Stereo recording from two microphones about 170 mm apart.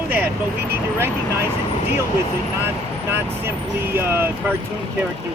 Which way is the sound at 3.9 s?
15° right (ahead or behind).